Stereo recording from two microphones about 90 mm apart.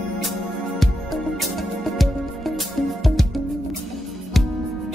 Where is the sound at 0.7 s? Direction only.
Centre (ahead or behind).